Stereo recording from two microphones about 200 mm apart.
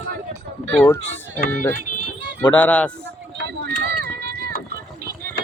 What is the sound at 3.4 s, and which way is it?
Run, 55° right (ahead or behind).